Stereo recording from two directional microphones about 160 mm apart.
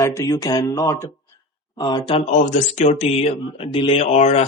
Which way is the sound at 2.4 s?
45° left (ahead or behind).